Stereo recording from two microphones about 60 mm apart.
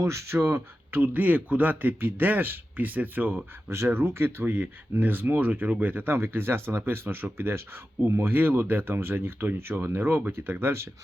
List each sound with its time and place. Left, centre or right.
0.0 s speech: right
4.0 s speech: right